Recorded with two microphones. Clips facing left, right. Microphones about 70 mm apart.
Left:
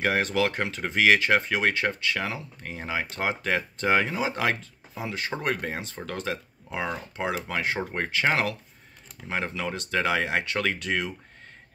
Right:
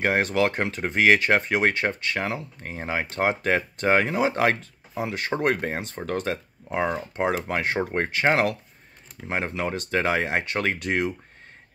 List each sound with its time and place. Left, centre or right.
0.0 s speech: right
9.5 s speech: right